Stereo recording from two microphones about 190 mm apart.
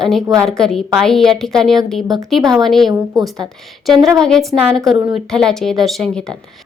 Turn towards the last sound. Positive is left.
turn(degrees=0)  # may be behind; listen again after turning